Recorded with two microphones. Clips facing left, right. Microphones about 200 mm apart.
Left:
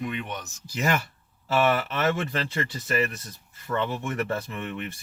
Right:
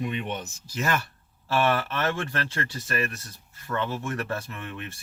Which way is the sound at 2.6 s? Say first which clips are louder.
Left 5 dB; 20° left (ahead or behind).